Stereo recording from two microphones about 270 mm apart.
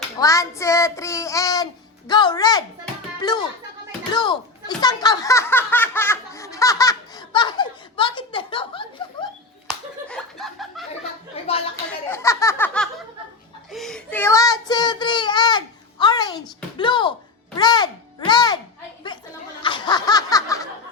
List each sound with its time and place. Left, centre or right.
0.2 s speech: centre
4.8 s laughter: centre
9.6 s slap: centre
11.4 s a sound: left
11.9 s a sound: centre
13.7 s speech: centre
19.6 s snicker: centre